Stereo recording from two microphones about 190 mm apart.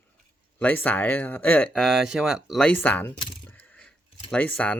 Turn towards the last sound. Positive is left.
turn(degrees=5)  # may be behind; listen again after turning